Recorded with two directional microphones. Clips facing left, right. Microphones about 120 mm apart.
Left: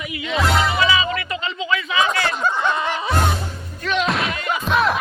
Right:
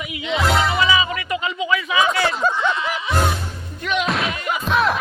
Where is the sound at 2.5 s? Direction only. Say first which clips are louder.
Left 1 dB; 50° left (ahead or behind).